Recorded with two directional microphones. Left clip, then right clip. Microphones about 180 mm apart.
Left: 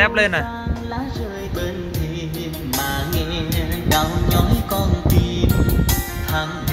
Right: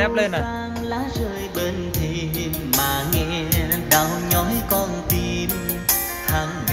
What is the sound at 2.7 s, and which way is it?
Music, 20° right (ahead or behind).